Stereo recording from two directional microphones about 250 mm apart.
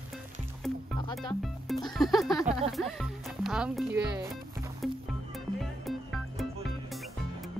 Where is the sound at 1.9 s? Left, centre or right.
Centre.